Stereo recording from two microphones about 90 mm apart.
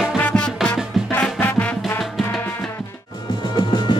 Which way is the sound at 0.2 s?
15° left (ahead or behind).